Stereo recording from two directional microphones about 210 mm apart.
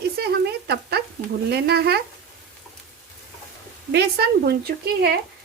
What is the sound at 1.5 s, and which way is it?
Speech, 50° right (ahead or behind).